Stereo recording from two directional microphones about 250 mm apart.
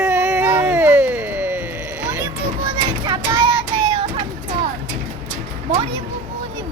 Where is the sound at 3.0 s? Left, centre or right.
Centre.